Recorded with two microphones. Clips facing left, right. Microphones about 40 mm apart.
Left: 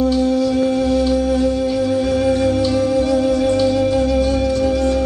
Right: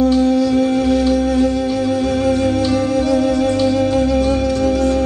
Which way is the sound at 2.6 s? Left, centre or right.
Right.